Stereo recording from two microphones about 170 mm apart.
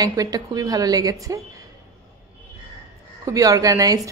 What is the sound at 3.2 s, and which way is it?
Speech, 20° right (ahead or behind).